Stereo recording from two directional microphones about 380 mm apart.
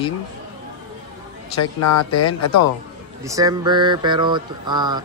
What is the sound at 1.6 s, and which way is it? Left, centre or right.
Speech, left.